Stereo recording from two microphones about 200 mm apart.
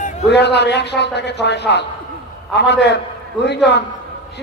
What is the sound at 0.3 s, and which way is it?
A man's voice, 55° left (ahead or behind).